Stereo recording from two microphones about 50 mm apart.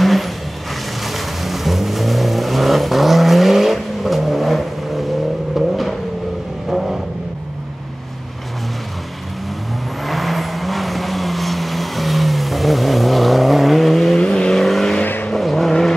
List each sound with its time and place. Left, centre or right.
0.0 s vehicle: centre
10.0 s vehicle: centre
14.2 s vehicle: centre